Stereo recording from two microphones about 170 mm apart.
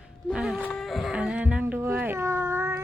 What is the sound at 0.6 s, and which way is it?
Music, 5° left (ahead or behind).